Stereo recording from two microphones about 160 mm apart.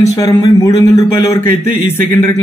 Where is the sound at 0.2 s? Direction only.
25° left (ahead or behind).